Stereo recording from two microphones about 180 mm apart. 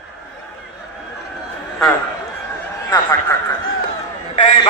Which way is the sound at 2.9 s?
15° left (ahead or behind).